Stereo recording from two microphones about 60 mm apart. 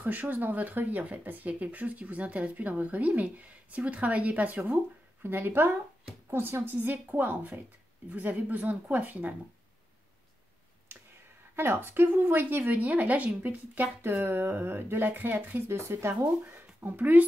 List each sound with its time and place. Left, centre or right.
0.0 s speech: right
5.2 s speech: right
11.5 s speech: right
15.7 s speech: right
16.1 s speech: right